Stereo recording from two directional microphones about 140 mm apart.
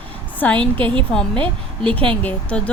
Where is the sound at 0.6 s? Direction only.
35° right (ahead or behind).